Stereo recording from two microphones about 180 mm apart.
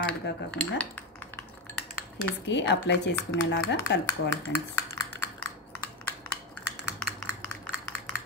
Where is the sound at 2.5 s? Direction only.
75° left (ahead or behind).